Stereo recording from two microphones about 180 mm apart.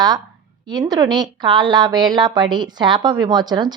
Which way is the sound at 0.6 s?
20° right (ahead or behind).